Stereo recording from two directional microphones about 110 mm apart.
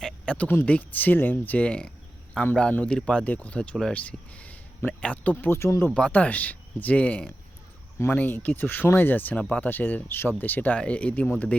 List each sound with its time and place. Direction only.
0.0 s speech: 10° left (ahead or behind)
5.9 s speech: 10° left (ahead or behind)